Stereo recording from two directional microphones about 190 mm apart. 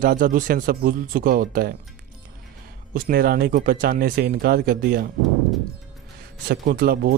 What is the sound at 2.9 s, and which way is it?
Speech, 50° right (ahead or behind).